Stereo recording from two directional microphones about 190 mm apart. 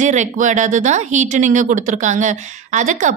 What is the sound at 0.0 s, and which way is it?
A woman's voice, 40° right (ahead or behind).